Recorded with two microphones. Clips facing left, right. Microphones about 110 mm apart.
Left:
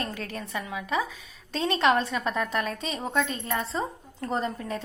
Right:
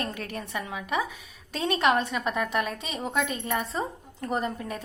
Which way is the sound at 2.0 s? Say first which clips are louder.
Even; 10° right (ahead or behind).